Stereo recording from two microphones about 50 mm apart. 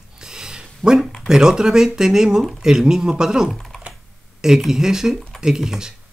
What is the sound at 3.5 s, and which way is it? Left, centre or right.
Computer keyboard, centre.